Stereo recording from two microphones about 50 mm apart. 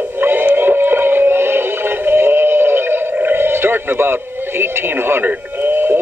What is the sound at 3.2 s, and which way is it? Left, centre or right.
Radio, right.